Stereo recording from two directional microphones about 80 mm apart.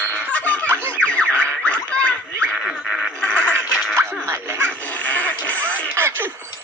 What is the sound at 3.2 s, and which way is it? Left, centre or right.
Music, centre.